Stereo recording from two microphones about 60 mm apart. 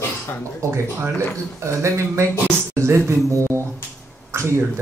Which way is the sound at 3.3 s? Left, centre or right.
Right.